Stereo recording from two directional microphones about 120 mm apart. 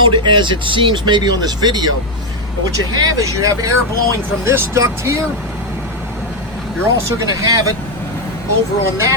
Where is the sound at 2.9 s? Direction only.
30° right (ahead or behind).